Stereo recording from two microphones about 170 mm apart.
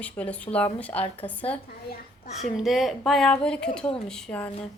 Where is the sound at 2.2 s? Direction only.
40° left (ahead or behind).